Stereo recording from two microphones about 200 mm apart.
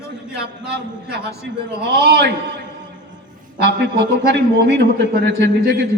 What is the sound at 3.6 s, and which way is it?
A man's voice, 60° right (ahead or behind).